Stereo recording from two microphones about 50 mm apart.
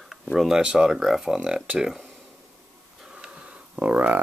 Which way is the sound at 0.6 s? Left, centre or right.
Centre.